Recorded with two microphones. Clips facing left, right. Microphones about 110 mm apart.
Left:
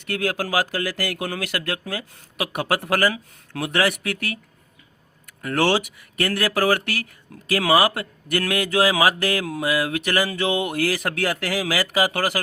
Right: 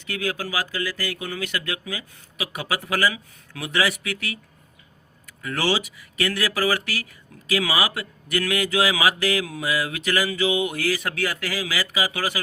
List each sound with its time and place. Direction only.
0.0 s speech: 60° left (ahead or behind)
5.4 s speech: 55° left (ahead or behind)